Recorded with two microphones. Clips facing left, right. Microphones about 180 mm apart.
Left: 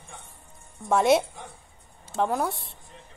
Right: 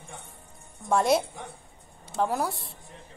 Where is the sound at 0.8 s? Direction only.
Centre (ahead or behind).